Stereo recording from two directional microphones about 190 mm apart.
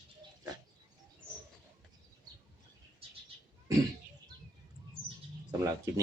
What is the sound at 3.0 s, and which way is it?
Bird, 30° right (ahead or behind).